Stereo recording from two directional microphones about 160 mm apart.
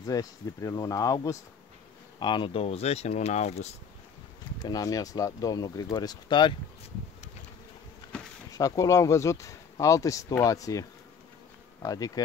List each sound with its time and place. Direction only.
0.0 s speech: 20° left (ahead or behind); by 3.7 s 40° left (ahead or behind)
4.6 s speech: 20° left (ahead or behind)
8.1 s a sound: 5° left (ahead or behind)
8.5 s speech: 20° left (ahead or behind)
11.8 s insect: 20° left (ahead or behind)